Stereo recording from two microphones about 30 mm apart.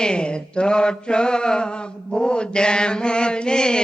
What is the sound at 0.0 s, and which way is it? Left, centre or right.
Mantra, left.